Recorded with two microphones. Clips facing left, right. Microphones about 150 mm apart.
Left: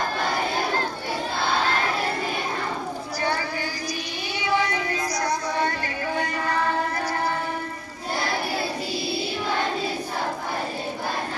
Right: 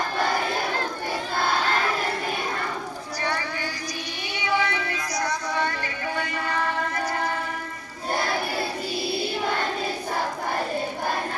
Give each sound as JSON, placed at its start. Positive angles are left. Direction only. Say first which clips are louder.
{"t": 4.4, "sound": "music", "louder": "left 1 dB", "side_deg": 35}